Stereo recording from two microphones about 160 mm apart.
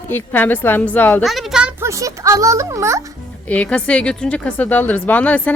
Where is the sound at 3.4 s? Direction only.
10° left (ahead or behind).